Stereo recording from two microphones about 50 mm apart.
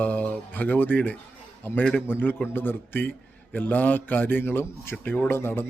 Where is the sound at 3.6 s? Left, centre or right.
Left.